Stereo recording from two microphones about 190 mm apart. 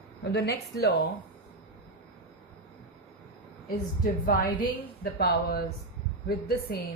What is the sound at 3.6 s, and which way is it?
A woman's voice, 50° left (ahead or behind).